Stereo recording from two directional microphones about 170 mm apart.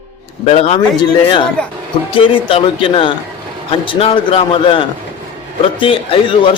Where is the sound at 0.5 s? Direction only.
35° left (ahead or behind).